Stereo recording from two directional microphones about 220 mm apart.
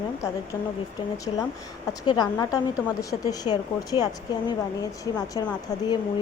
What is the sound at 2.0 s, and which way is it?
A woman's voice, 20° left (ahead or behind).